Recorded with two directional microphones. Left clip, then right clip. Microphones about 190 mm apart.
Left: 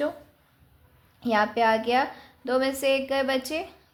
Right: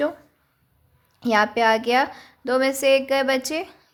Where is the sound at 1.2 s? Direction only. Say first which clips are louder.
Right 4 dB; 35° right (ahead or behind).